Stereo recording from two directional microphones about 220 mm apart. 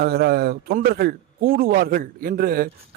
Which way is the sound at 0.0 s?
45° right (ahead or behind).